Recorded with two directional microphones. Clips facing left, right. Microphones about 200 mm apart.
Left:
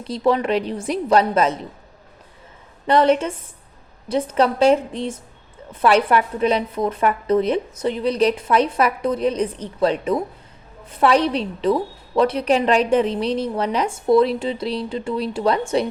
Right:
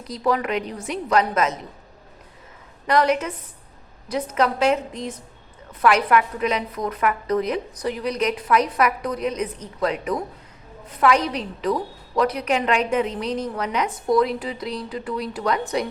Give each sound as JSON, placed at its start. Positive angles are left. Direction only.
{"t": 0.0, "sound": "a woman's voice", "side_deg": 25}
{"t": 2.8, "sound": "a woman's voice", "side_deg": 30}